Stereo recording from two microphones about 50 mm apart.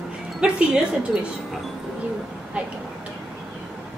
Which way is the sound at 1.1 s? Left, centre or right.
Centre.